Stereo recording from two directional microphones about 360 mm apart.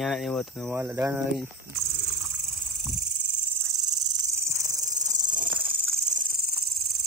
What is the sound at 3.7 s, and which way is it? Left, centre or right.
Insect, centre.